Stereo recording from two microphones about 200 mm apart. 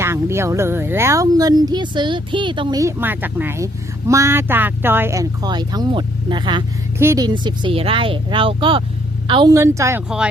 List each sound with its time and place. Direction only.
0.0 s speech: 15° right (ahead or behind)